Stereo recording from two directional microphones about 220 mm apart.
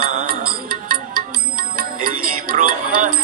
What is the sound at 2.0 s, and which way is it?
Music, 40° right (ahead or behind).